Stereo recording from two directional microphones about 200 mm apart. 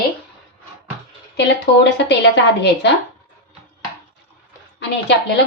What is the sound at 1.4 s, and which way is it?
A woman's voice, 60° left (ahead or behind).